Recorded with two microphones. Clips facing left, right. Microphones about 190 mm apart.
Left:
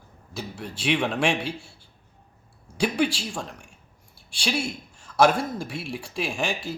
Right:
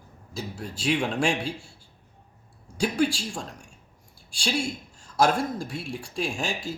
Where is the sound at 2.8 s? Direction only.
65° left (ahead or behind).